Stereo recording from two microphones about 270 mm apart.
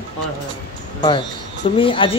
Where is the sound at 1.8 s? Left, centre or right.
Centre.